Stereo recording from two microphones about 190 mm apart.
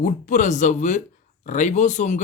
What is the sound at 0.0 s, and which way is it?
Speech, 40° left (ahead or behind).